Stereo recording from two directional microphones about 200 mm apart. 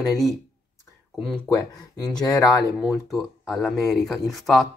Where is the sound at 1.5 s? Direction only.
15° left (ahead or behind).